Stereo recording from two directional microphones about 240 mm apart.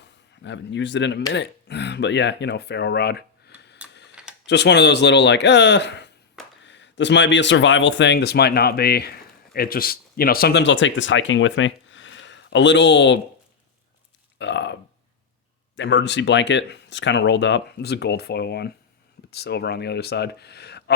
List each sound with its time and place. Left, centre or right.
0.0 s speech: left
4.1 s computer keyboard: centre
4.4 s speech: left
14.3 s burping: left
15.7 s speech: left